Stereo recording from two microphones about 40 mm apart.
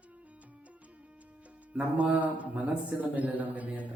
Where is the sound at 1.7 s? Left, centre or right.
Right.